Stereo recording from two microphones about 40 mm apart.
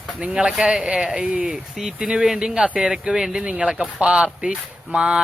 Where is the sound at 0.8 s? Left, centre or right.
Centre.